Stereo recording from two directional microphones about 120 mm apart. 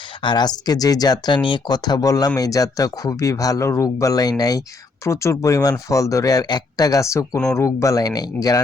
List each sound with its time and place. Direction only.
0.2 s speech: 40° left (ahead or behind)